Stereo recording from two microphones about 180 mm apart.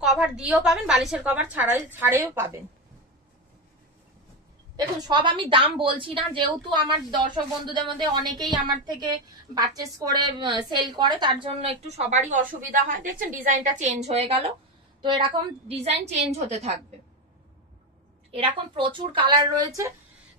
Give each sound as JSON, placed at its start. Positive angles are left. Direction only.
{"t": 0.0, "sound": "a woman's voice", "side_deg": -5}
{"t": 4.7, "sound": "a woman's voice", "side_deg": -25}
{"t": 18.3, "sound": "a woman's voice", "side_deg": -30}